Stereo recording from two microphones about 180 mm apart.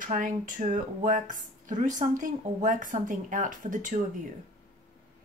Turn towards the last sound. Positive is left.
turn(degrees=-45)  # may be behind; listen again after turning